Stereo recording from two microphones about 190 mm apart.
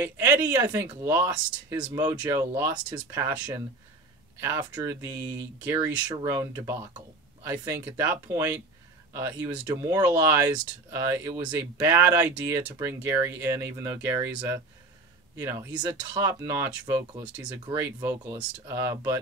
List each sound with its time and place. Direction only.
0.0 s speech: 15° right (ahead or behind)